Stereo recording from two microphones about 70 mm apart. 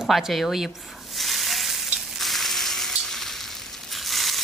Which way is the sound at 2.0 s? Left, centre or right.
Centre.